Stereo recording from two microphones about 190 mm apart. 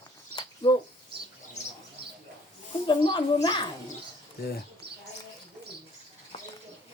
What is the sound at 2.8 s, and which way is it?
Speech, 25° left (ahead or behind).